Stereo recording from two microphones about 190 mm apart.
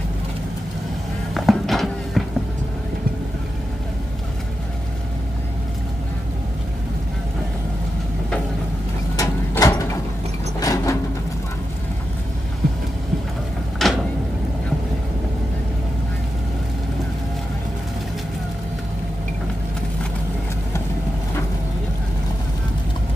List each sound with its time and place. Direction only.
1.3 s music: centre (ahead or behind)
9.1 s mechanisms: 20° left (ahead or behind)
10.6 s vehicle: 20° left (ahead or behind)
13.8 s a sound: centre (ahead or behind)